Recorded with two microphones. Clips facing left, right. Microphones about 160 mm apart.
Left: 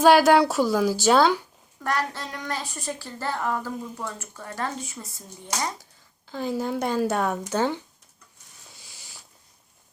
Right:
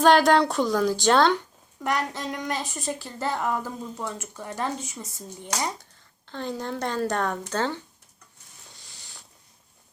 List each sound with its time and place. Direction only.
0.0 s a woman's voice: 5° left (ahead or behind)
1.8 s a woman's voice: 20° right (ahead or behind)
6.2 s speech: 5° left (ahead or behind)
8.7 s a sound: 5° left (ahead or behind)